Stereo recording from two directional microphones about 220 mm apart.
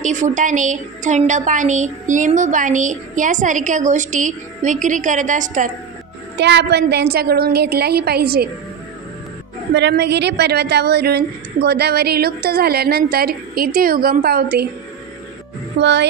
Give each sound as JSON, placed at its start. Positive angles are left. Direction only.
{"t": 0.0, "sound": "a woman's voice", "side_deg": -35}
{"t": 6.3, "sound": "a woman's voice", "side_deg": -50}
{"t": 9.8, "sound": "a woman's voice", "side_deg": -50}
{"t": 15.8, "sound": "a woman's voice", "side_deg": -50}